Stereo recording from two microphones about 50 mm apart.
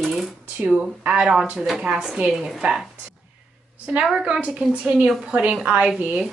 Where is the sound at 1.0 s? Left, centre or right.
Right.